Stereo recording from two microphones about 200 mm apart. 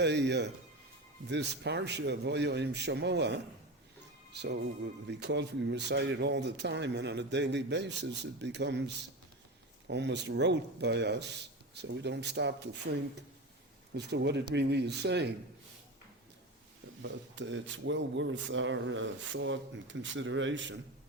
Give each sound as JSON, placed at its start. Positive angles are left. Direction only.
{"t": 0.0, "sound": "speech", "side_deg": -60}
{"t": 9.8, "sound": "speech", "side_deg": -60}
{"t": 13.9, "sound": "speech", "side_deg": -60}
{"t": 17.0, "sound": "speech", "side_deg": -65}